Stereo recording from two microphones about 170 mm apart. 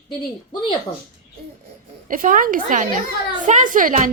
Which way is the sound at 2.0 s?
50° right (ahead or behind).